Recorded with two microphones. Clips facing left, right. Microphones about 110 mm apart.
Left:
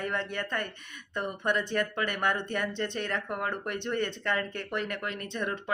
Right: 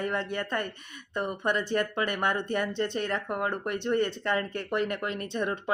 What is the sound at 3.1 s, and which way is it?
Speech, 20° right (ahead or behind).